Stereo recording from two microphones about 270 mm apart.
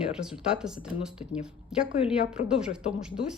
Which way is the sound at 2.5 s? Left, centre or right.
Centre.